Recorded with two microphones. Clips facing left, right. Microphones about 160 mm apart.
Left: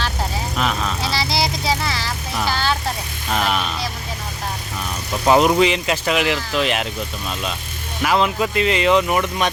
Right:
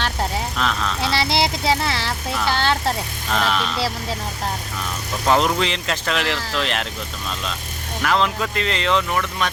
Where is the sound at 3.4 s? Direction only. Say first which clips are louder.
Even; 5° left (ahead or behind).